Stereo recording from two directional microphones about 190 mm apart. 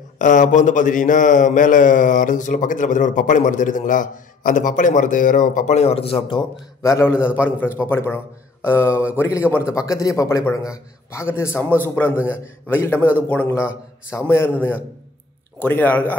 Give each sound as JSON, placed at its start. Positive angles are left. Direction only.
{"t": 0.2, "sound": "a man's voice", "side_deg": 45}
{"t": 6.8, "sound": "a man's voice", "side_deg": 15}